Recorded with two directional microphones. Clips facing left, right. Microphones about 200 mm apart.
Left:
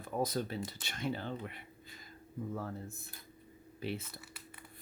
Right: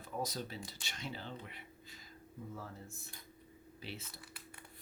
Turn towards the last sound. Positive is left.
turn(degrees=55)  # may be behind; listen again after turning